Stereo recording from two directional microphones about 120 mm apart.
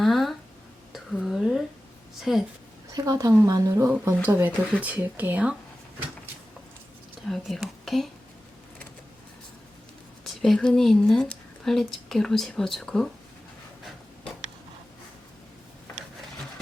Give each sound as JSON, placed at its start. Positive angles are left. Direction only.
{"t": 0.0, "sound": "a sound", "side_deg": 0}
{"t": 0.9, "sound": "whispering", "side_deg": 0}
{"t": 2.3, "sound": "speech", "side_deg": 0}
{"t": 2.9, "sound": "a woman's voice", "side_deg": -30}
{"t": 7.2, "sound": "speech", "side_deg": 0}
{"t": 10.4, "sound": "speech", "side_deg": 0}